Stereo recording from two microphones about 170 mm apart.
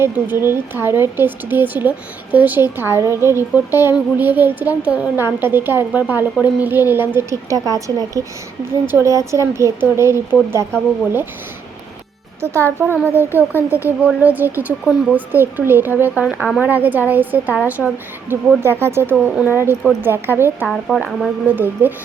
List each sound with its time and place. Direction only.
0.0 s a woman's voice: 15° right (ahead or behind)
12.4 s a woman's voice: 15° right (ahead or behind)
13.3 s speech: 15° left (ahead or behind)
14.0 s a woman's voice: 10° right (ahead or behind)
20.7 s a woman's voice: centre (ahead or behind)